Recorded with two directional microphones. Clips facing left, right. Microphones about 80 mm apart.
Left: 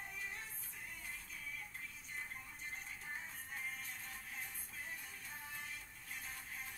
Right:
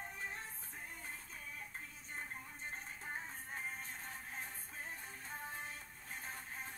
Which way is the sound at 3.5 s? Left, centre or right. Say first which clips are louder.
Right 1 dB; right.